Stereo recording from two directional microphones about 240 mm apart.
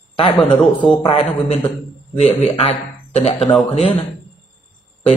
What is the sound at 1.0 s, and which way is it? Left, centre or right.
A man's voice, left.